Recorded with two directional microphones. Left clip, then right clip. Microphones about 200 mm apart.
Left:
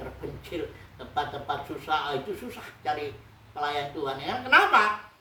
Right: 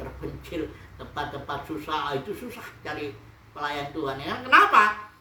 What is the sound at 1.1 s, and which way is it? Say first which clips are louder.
Speech: left 2 dB; 5° left (ahead or behind).